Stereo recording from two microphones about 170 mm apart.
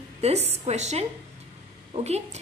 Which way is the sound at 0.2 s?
40° right (ahead or behind).